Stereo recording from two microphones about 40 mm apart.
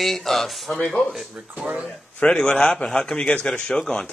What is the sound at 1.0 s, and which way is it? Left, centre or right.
Speech, left.